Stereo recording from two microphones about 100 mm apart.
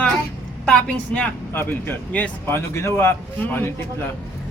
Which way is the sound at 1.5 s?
20° left (ahead or behind).